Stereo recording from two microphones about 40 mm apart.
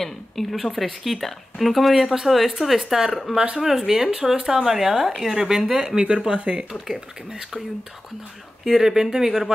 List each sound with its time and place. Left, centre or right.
0.0 s speech: centre
5.9 s speech: right
6.3 s speech: right
6.7 s speech: centre
8.6 s speech: centre